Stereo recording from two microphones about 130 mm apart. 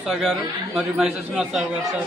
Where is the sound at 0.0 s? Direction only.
5° right (ahead or behind).